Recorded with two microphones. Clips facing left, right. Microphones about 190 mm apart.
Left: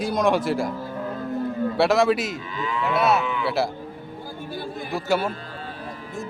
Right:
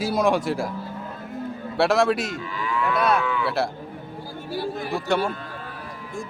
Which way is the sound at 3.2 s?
20° left (ahead or behind).